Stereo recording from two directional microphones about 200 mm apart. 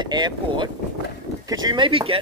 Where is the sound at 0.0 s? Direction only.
20° right (ahead or behind).